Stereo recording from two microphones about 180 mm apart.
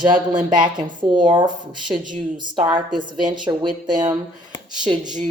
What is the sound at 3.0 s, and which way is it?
A woman's voice, 25° right (ahead or behind).